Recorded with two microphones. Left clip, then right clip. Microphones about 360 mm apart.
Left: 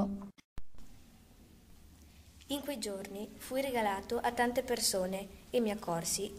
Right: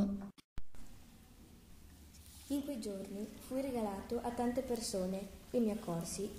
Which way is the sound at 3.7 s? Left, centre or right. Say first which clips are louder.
Left 6 dB; left.